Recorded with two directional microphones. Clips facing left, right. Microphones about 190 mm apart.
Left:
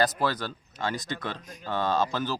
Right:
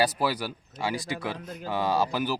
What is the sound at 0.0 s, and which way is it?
Speech, 10° right (ahead or behind).